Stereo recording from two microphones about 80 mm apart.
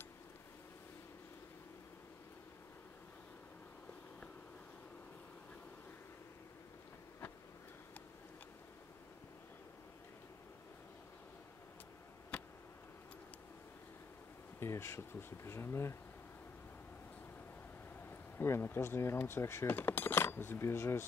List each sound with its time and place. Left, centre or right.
14.6 s speech: left
18.4 s speech: left